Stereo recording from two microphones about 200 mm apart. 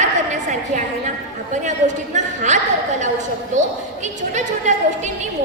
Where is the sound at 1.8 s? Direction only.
35° right (ahead or behind).